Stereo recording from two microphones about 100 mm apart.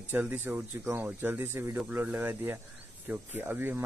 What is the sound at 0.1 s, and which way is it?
Speech, 20° right (ahead or behind).